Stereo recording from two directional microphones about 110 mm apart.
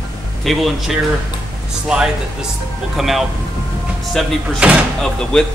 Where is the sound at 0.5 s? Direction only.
Centre (ahead or behind).